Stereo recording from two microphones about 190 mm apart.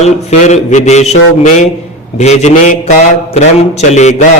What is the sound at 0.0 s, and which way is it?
A man's voice, 35° left (ahead or behind).